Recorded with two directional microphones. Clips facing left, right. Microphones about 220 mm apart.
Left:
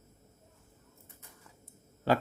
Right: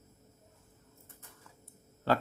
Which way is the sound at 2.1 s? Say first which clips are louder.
Left 2 dB; 15° left (ahead or behind).